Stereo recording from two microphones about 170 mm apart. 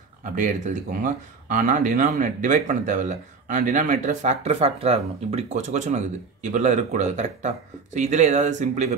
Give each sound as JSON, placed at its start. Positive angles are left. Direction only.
{"t": 0.2, "sound": "speech", "side_deg": -50}